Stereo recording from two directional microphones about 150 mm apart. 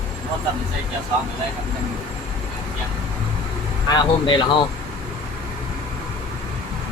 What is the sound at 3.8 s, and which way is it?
Speech, 30° left (ahead or behind).